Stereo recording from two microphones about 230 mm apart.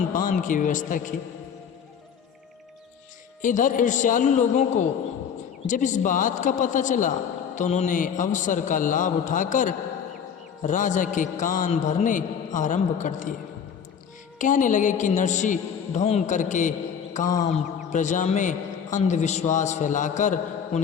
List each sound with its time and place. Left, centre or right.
0.3 s a man's voice: left
3.4 s a man's voice: left
14.3 s a man's voice: left